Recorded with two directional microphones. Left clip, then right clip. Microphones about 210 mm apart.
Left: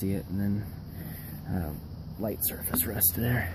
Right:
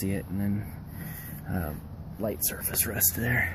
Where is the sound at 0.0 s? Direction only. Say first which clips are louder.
Even; 5° right (ahead or behind).